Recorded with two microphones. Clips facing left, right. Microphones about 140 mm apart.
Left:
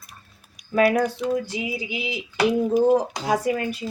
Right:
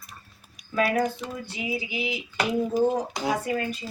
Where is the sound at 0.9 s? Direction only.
90° left.